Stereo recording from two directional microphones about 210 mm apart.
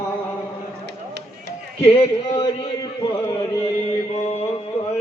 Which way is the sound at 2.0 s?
25° left (ahead or behind).